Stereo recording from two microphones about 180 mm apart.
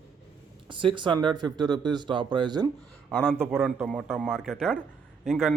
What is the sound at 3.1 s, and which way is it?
A man's voice, 5° left (ahead or behind).